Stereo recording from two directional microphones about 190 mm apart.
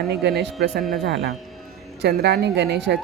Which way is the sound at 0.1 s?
60° right (ahead or behind).